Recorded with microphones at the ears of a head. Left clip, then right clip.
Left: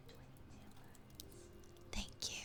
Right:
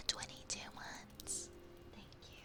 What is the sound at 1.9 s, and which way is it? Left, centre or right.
Whispering, left.